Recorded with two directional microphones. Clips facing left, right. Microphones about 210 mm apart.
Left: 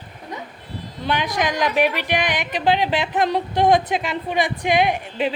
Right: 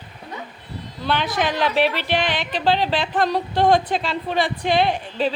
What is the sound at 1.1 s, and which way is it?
A woman's voice, 15° left (ahead or behind).